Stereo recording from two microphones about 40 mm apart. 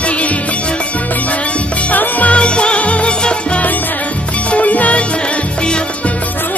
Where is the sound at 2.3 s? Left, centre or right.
Left.